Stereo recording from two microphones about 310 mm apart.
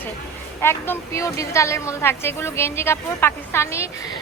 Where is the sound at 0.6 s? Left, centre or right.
Centre.